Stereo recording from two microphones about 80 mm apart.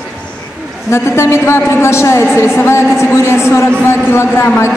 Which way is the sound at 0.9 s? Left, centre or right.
Left.